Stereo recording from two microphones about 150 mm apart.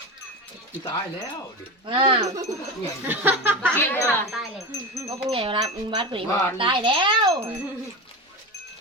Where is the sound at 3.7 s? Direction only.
15° left (ahead or behind).